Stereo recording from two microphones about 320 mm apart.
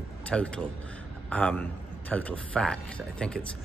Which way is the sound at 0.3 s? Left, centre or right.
Centre.